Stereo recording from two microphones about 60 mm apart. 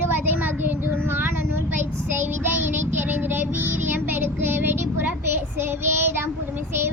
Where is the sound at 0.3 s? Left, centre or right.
Right.